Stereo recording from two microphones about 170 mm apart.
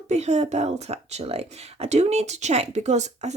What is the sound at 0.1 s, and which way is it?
Speech, 40° right (ahead or behind).